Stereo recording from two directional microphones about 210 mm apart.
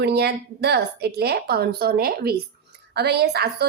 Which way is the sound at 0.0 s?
50° right (ahead or behind).